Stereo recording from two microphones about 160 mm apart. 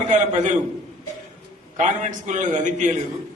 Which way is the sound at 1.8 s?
50° right (ahead or behind).